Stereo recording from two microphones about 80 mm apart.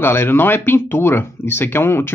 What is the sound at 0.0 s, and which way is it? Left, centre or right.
Speech, left.